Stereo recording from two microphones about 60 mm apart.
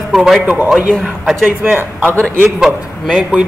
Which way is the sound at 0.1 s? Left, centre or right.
Centre.